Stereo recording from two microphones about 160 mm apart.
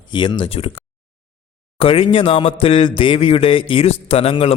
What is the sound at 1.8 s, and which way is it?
A man's voice, 35° left (ahead or behind).